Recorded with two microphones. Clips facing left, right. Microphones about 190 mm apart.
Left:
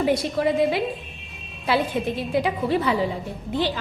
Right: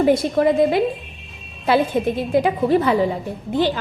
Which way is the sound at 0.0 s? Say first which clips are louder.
Right 5 dB; 50° right (ahead or behind).